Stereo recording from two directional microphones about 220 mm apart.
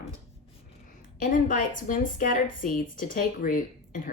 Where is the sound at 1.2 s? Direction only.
35° left (ahead or behind).